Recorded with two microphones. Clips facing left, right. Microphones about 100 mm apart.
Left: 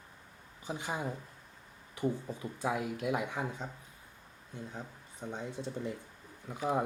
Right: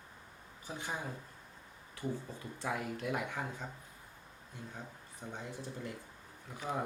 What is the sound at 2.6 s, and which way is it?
Speech, 15° left (ahead or behind).